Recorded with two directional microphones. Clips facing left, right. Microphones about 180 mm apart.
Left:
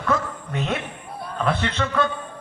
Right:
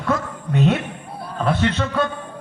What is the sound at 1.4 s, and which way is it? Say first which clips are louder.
Speech: right 3 dB; 20° right (ahead or behind).